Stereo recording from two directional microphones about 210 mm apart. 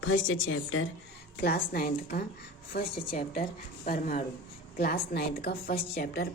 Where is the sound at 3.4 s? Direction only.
40° left (ahead or behind).